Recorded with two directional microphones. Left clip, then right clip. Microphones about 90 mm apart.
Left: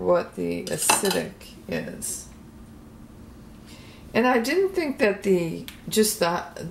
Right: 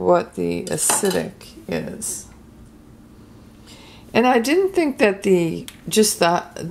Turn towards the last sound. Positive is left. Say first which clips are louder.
# right 6 dB
turn(degrees=-35)  # may be behind; listen again after turning